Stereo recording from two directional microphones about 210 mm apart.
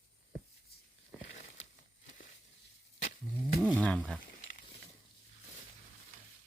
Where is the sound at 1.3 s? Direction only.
35° left (ahead or behind).